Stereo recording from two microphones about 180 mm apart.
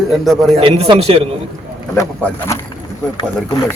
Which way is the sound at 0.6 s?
30° right (ahead or behind).